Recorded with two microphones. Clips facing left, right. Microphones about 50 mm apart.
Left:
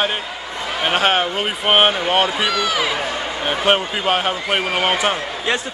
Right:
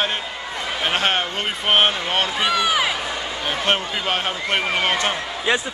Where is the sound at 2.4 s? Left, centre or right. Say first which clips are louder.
Even; right.